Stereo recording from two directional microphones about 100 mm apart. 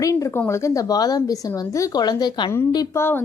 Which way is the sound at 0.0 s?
30° left (ahead or behind).